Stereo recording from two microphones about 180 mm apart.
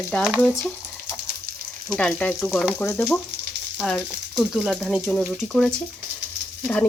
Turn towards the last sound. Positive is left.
turn(degrees=5)  # may be behind; listen again after turning